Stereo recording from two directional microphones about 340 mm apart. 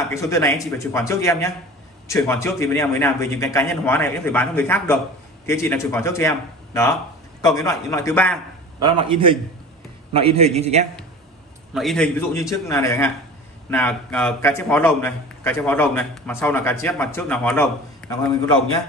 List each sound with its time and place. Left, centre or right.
0.1 s a man's voice: centre
8.8 s a man's voice: centre
11.7 s a man's voice: centre